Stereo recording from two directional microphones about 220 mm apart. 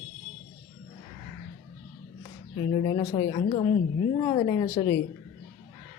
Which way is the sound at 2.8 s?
20° left (ahead or behind).